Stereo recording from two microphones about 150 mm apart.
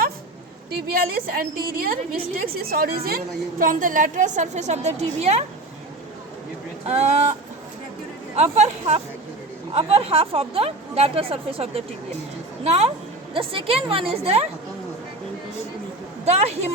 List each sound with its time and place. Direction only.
0.9 s a woman's voice: 75° right (ahead or behind)
3.6 s a woman's voice: 65° right (ahead or behind); by 5.5 s 45° right (ahead or behind)
6.8 s a woman's voice: 45° right (ahead or behind)
8.4 s a woman's voice: 45° right (ahead or behind)
16.2 s a woman's voice: 45° right (ahead or behind)